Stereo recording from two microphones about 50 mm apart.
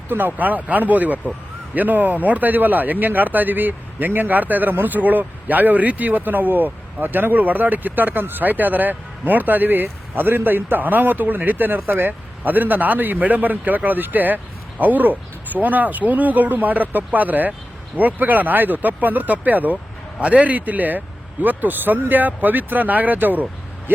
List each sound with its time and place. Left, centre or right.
0.1 s speech: right
11.8 s speech: right